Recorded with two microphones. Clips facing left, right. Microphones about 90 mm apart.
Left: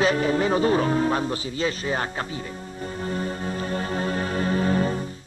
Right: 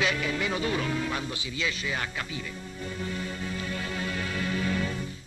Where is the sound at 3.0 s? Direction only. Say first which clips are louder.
Left 7 dB; 40° left (ahead or behind).